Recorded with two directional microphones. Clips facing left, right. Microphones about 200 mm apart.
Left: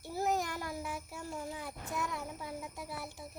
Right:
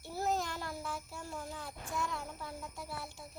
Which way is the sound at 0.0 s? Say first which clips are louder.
Left 2 dB; 15° left (ahead or behind).